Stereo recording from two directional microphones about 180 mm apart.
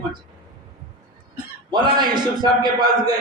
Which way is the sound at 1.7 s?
25° right (ahead or behind).